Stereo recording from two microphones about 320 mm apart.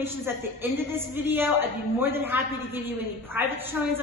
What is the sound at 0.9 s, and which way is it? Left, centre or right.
A woman's voice, centre.